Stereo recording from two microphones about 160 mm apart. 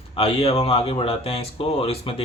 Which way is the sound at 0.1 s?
35° left (ahead or behind).